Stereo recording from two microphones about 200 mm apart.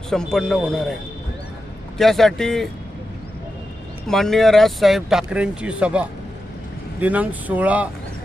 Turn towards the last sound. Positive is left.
turn(degrees=-5)  # may be behind; listen again after turning